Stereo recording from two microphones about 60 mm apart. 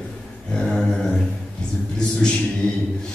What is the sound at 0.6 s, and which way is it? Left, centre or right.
Speech, centre.